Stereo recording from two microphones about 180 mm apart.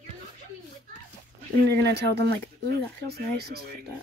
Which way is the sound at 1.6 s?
65° right (ahead or behind).